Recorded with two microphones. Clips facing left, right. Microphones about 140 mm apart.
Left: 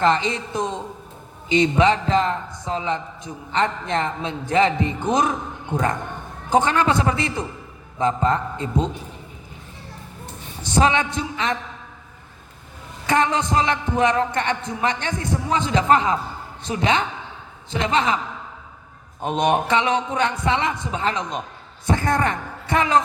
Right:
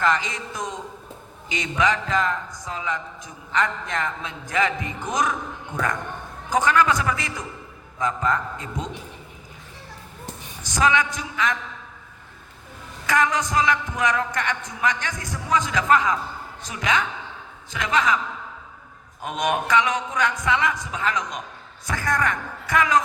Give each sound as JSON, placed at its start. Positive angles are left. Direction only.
{"t": 0.0, "sound": "a man's voice", "side_deg": 30}
{"t": 10.6, "sound": "a man's voice", "side_deg": 30}
{"t": 13.1, "sound": "a man's voice", "side_deg": 30}
{"t": 19.2, "sound": "a man's voice", "side_deg": 30}